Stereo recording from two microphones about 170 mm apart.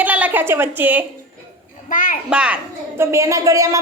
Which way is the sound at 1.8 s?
50° left (ahead or behind).